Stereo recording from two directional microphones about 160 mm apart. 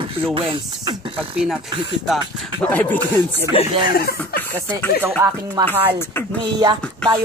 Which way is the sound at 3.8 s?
70° left (ahead or behind).